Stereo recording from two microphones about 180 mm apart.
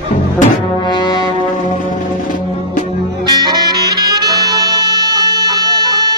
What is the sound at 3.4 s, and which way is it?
Music, 25° right (ahead or behind).